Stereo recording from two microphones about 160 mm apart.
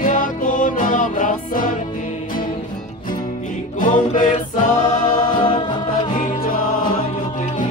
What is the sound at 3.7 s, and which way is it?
Music, 55° left (ahead or behind).